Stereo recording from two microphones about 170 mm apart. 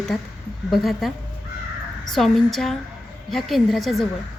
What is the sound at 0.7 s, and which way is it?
Speech, centre (ahead or behind).